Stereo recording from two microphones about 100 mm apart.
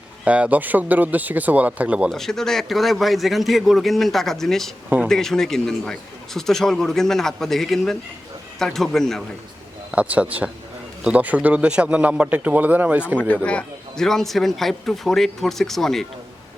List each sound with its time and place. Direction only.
0.3 s a man's voice: 15° right (ahead or behind)
2.0 s a man's voice: 5° left (ahead or behind)
9.9 s a man's voice: 10° right (ahead or behind)
13.1 s a man's voice: 15° left (ahead or behind)